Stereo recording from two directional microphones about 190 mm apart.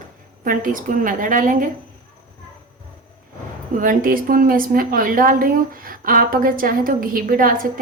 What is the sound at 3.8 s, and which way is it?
A woman's voice, 45° right (ahead or behind).